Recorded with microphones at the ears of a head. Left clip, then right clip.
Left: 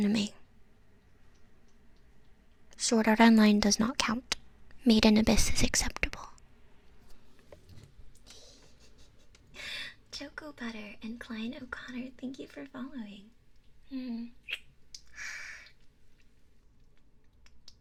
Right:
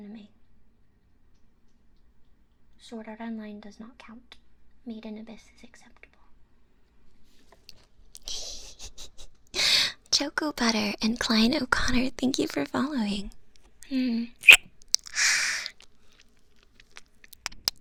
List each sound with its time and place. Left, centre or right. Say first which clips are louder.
0.0 s speech: left 16 dB; left
2.6 s speech: left 15 dB; left
7.7 s a sound: right 9 dB; right